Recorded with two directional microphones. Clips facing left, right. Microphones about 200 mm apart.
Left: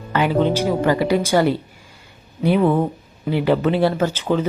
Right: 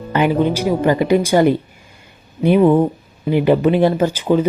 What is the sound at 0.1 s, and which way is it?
Speech, 15° right (ahead or behind).